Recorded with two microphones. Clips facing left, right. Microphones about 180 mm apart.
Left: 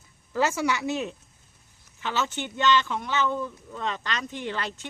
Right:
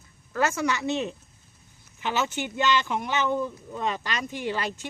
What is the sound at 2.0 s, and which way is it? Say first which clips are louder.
Speech: right 2 dB; 15° right (ahead or behind).